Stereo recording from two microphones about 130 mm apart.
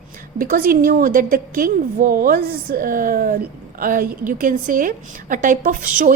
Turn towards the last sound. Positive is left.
turn(degrees=-90)